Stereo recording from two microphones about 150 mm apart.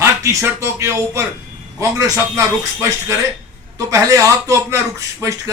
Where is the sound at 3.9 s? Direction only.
20° right (ahead or behind).